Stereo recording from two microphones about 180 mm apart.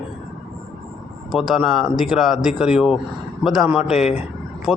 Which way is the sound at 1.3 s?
Centre (ahead or behind).